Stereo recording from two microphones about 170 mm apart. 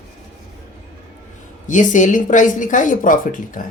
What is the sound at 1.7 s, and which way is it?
A woman's voice, 45° left (ahead or behind).